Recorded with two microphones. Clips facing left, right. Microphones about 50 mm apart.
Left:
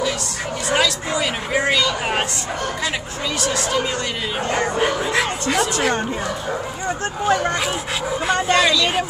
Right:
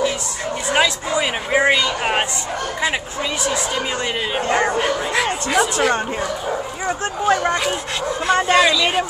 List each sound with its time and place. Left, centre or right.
0.7 s a sound: right
4.7 s bow-wow: centre
8.3 s speech: centre